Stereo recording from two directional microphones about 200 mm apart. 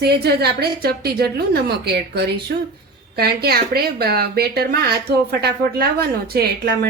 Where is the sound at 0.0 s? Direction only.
55° right (ahead or behind).